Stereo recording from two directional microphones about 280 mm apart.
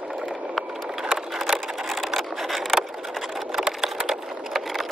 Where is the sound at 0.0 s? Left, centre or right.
Centre.